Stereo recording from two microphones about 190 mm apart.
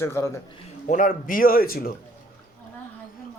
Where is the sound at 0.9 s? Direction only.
45° left (ahead or behind).